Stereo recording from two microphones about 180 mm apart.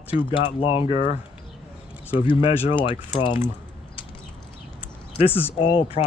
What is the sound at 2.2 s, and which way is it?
Speech, 30° left (ahead or behind).